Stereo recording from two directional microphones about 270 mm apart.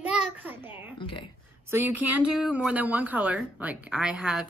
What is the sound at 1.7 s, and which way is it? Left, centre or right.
A woman's voice, centre.